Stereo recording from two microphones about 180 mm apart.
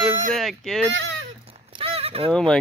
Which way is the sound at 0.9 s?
90° right.